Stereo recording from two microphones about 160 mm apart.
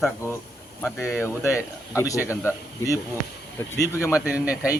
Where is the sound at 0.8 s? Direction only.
10° left (ahead or behind).